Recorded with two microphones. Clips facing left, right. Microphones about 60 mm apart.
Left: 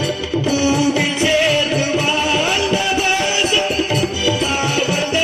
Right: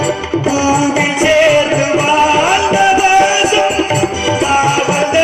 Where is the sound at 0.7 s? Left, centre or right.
Right.